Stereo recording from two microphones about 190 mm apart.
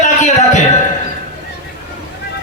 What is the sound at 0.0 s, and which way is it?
Music, 40° left (ahead or behind).